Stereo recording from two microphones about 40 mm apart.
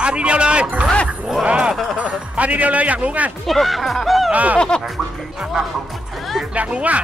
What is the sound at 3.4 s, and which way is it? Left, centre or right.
Speech, centre.